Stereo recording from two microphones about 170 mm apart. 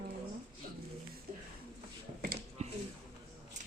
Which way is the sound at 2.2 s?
50° right (ahead or behind).